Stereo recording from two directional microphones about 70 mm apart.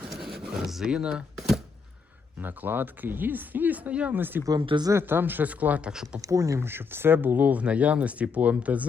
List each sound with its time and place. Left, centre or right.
0.2 s a sound: centre
2.4 s speech: right
4.4 s speech: right
4.9 s speech: right
5.9 s speech: centre
6.2 s speech: right
6.6 s speech: right